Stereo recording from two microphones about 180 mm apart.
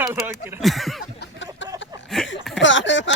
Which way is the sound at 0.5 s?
Centre (ahead or behind).